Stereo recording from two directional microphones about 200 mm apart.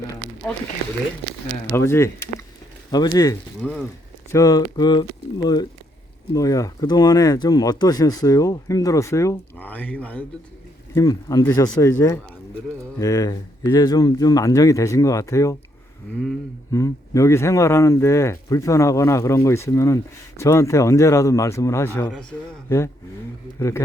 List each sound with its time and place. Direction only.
1.7 s speech: 15° left (ahead or behind)
10.9 s speech: 15° left (ahead or behind)
16.1 s a sound: centre (ahead or behind)
16.7 s speech: 15° left (ahead or behind)
23.6 s speech: 15° left (ahead or behind)